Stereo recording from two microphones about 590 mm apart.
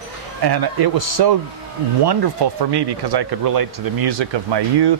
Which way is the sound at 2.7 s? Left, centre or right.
Right.